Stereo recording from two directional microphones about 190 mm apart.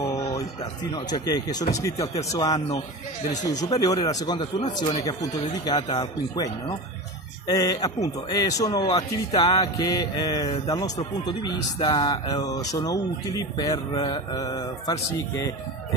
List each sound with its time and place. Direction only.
0.0 s music: 15° left (ahead or behind)
0.9 s speech: 20° left (ahead or behind)